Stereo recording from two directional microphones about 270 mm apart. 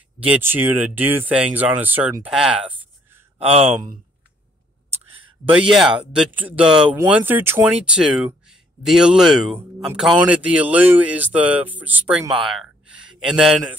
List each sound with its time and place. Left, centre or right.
0.3 s speech: centre
3.3 s speech: right
5.4 s speech: centre
12.4 s a sound: centre